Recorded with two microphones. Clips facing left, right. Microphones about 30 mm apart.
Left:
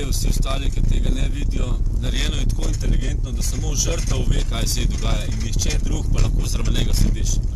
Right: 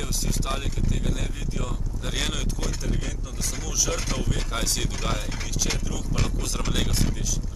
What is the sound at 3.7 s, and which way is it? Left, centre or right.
Speech, left.